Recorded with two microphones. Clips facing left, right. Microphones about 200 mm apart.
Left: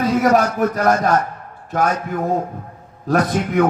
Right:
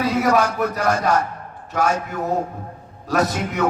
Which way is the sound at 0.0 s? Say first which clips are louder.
Left 3 dB; 50° left (ahead or behind).